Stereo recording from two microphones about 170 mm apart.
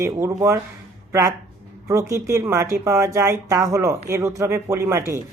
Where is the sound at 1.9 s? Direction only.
15° right (ahead or behind).